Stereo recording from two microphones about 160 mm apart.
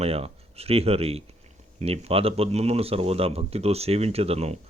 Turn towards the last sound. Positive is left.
turn(degrees=-40)  # may be behind; listen again after turning